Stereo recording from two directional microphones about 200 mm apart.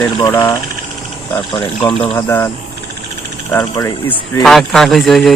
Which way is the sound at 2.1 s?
10° left (ahead or behind).